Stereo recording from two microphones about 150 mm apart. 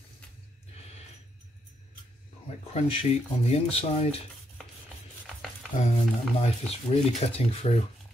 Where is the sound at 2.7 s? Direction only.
40° left (ahead or behind).